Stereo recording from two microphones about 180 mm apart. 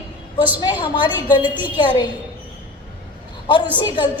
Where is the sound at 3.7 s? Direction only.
25° left (ahead or behind).